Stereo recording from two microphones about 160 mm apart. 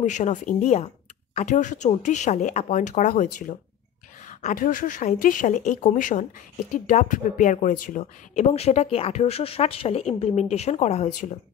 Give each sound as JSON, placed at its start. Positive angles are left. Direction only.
{"t": 0.0, "sound": "speech", "side_deg": 50}
{"t": 4.3, "sound": "speech", "side_deg": 55}
{"t": 8.0, "sound": "speech", "side_deg": 40}